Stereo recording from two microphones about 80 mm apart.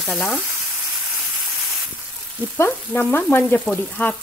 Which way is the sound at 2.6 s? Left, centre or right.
Left.